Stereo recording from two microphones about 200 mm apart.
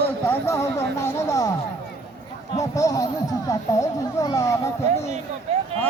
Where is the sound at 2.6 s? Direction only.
15° left (ahead or behind).